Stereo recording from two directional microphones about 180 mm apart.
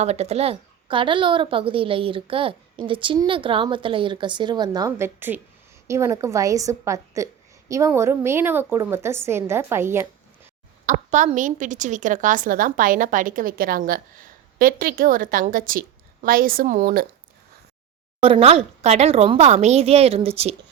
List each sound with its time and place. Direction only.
0.0 s a woman's voice: 35° right (ahead or behind); by 10.5 s 15° right (ahead or behind)
10.8 s a woman's voice: 45° right (ahead or behind)
18.2 s speech: 30° right (ahead or behind)